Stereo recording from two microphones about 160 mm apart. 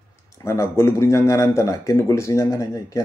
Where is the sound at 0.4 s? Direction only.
15° left (ahead or behind).